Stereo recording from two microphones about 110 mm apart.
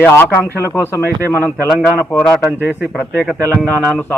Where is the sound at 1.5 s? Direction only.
Centre (ahead or behind).